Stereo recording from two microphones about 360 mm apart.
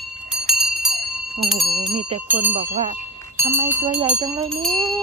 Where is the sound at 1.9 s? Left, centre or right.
Centre.